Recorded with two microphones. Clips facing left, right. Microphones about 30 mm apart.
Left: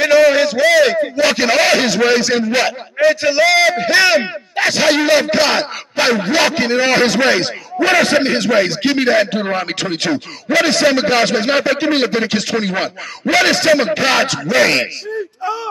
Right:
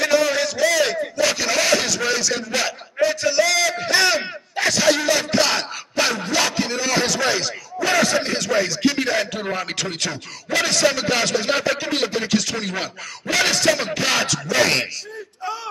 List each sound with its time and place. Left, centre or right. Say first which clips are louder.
0.0 s a sound: left 8 dB; left
0.9 s a man's voice: left 6 dB; left
15.4 s speech: left 5 dB; centre